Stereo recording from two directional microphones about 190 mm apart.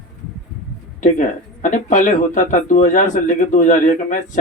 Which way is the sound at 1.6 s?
40° left (ahead or behind).